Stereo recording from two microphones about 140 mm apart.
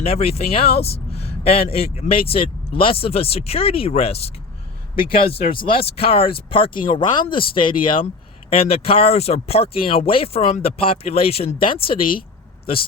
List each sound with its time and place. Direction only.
0.0 s speech: 45° left (ahead or behind)